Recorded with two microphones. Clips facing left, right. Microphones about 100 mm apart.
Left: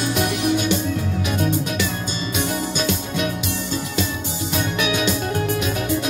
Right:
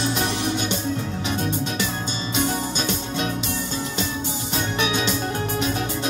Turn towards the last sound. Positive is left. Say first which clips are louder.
# left 2 dB
turn(degrees=-30)  # may be behind; listen again after turning